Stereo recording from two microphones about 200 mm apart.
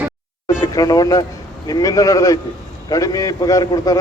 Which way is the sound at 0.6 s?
20° left (ahead or behind).